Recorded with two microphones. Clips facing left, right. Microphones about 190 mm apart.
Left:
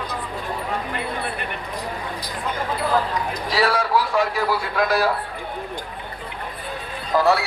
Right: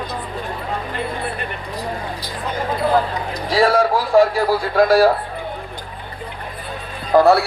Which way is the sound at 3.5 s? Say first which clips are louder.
Right 5 dB; 45° right (ahead or behind).